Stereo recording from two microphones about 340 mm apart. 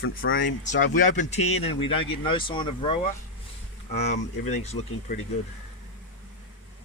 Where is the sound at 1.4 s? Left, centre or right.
Left.